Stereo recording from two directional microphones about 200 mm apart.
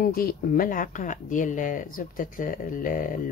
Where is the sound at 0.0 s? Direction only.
45° left (ahead or behind).